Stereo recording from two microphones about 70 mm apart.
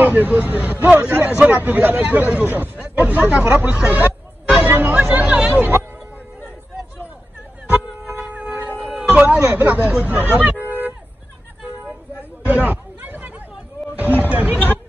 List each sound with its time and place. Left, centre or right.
0.0 s speech: right
3.5 s hubbub: centre
5.5 s a sound: right
7.7 s music: right
8.8 s speech: centre
10.6 s a sound: right
12.4 s chatter: right
13.9 s a sound: right
14.3 s music: right